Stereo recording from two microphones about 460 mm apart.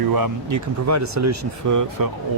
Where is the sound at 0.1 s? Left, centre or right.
Right.